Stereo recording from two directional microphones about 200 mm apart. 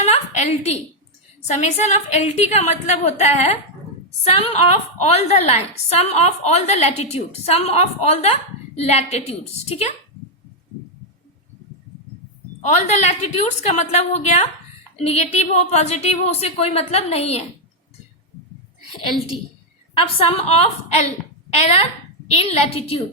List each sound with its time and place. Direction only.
0.0 s a sound: 35° left (ahead or behind)
1.5 s a woman's voice: 35° left (ahead or behind)
13.1 s a woman's voice: 35° left (ahead or behind)
19.9 s a woman's voice: 30° left (ahead or behind)